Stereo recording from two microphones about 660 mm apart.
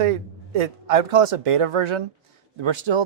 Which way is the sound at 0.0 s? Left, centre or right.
Right.